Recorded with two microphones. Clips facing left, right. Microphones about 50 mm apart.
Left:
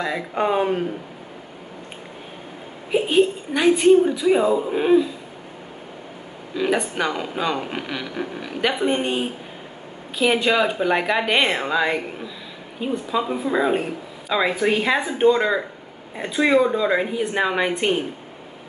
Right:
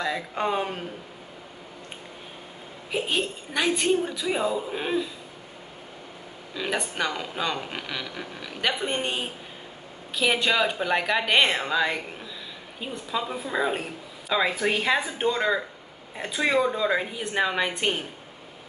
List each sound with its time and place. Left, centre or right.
0.0 s speech: centre
2.9 s speech: centre
6.5 s speech: centre